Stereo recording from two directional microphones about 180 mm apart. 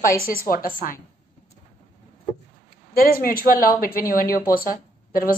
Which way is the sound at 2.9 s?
55° left (ahead or behind).